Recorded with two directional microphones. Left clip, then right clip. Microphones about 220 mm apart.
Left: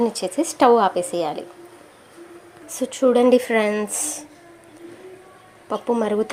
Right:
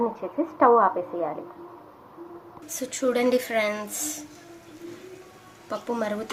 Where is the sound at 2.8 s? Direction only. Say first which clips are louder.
Left 8 dB; 20° left (ahead or behind).